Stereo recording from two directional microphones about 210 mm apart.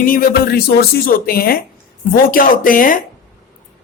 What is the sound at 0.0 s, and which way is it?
Speech, 45° left (ahead or behind).